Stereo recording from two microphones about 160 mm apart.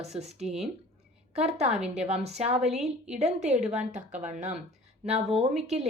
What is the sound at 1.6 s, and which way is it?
Speech, 5° right (ahead or behind).